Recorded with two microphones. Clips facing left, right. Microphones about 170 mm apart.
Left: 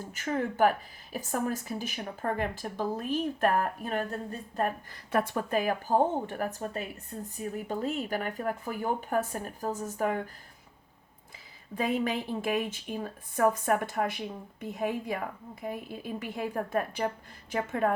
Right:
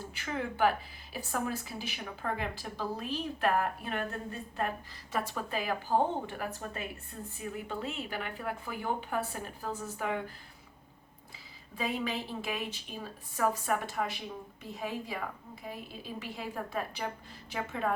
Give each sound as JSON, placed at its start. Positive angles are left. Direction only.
{"t": 0.1, "sound": "a woman's voice", "side_deg": 45}
{"t": 11.7, "sound": "a woman's voice", "side_deg": 50}